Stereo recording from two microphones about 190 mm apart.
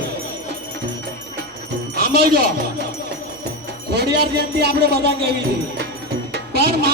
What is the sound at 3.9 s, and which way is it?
Speech, 60° right (ahead or behind).